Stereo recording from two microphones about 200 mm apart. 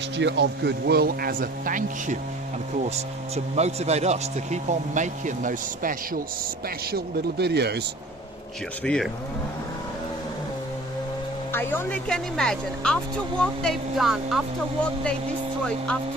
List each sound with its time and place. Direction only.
0.2 s speech: 60° right (ahead or behind); by 6.0 s 40° right (ahead or behind)
6.9 s speech: 55° right (ahead or behind)
8.8 s speech: 5° left (ahead or behind)
11.5 s speech: 10° left (ahead or behind)